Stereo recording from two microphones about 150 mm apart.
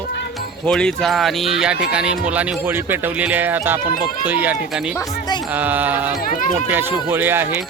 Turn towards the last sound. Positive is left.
turn(degrees=-15)  # may be behind; listen again after turning